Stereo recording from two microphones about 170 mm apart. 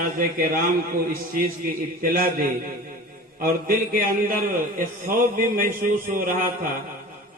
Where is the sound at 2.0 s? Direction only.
55° right (ahead or behind).